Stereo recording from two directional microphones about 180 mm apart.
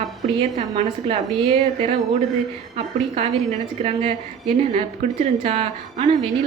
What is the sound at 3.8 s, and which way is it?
Speech, 35° right (ahead or behind).